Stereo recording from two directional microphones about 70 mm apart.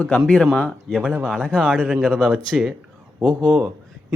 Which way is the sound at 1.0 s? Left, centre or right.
Centre.